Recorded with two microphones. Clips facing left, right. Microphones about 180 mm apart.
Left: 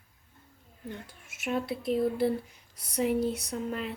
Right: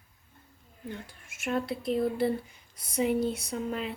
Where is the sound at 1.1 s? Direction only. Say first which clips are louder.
Right 1 dB; centre (ahead or behind).